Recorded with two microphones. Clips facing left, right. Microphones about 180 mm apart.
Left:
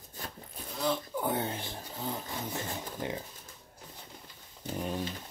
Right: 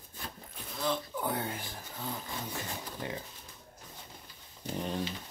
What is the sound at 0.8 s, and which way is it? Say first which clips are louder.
Insect: left 2 dB; 15° left (ahead or behind).